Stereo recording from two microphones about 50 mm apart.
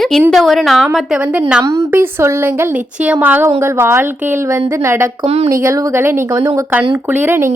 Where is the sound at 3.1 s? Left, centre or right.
Right.